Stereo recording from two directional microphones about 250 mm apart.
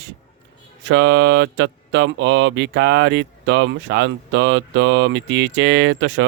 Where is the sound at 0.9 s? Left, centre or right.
Right.